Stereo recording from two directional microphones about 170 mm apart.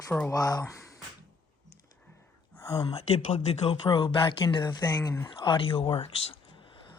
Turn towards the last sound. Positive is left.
turn(degrees=35)  # may be behind; listen again after turning